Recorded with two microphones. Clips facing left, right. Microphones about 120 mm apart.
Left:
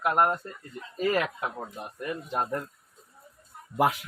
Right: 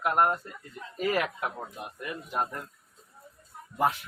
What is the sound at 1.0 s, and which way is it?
Speech, 15° right (ahead or behind).